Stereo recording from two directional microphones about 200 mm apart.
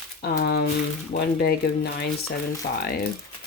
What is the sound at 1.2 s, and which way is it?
Speech, 55° left (ahead or behind).